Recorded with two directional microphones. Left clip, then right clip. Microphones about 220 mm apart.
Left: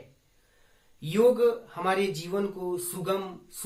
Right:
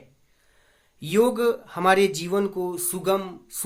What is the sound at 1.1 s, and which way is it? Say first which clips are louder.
Speech: right 1 dB; 50° right (ahead or behind).